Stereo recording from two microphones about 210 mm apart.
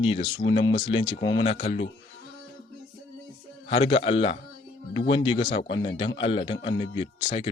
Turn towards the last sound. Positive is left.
turn(degrees=30)  # may be behind; listen again after turning